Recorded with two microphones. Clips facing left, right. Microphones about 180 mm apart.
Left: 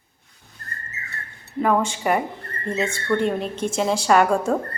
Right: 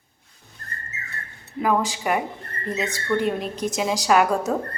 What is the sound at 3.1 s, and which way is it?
Speech, 5° right (ahead or behind).